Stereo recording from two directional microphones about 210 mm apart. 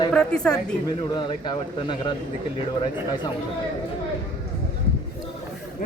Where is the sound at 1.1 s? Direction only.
20° left (ahead or behind).